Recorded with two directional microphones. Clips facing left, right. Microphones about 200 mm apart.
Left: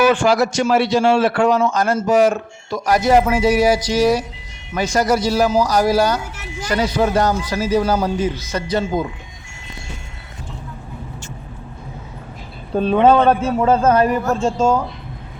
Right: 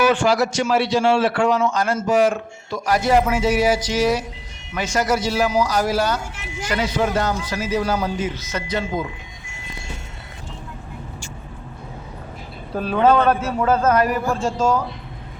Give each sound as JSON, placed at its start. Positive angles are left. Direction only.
{"t": 0.1, "sound": "a man's voice", "side_deg": 45}
{"t": 12.7, "sound": "a man's voice", "side_deg": 25}